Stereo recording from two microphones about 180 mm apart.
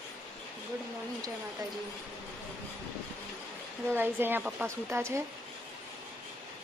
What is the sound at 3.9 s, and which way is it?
Speech, 10° right (ahead or behind).